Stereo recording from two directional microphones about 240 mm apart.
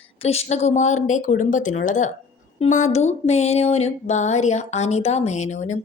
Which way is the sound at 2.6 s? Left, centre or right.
Left.